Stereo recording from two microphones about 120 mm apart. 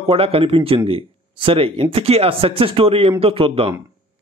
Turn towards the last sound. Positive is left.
turn(degrees=-50)  # may be behind; listen again after turning